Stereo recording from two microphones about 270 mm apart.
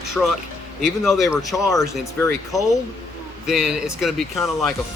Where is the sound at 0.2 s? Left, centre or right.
Centre.